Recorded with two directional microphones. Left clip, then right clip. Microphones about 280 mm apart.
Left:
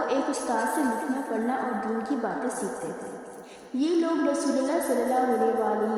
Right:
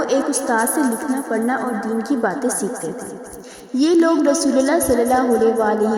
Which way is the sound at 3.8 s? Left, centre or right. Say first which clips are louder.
Right 10 dB; right.